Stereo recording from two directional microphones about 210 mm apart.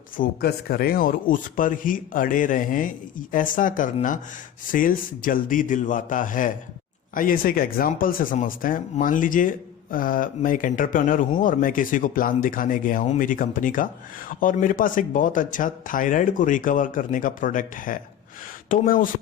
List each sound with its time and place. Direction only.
0.2 s speech: 45° left (ahead or behind)